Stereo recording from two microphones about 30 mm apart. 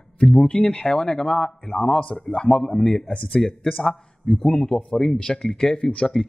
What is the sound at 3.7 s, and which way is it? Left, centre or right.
Speech, centre.